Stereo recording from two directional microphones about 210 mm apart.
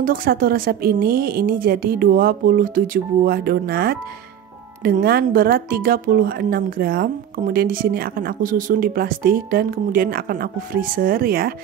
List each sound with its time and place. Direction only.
0.0 s speech: 45° right (ahead or behind)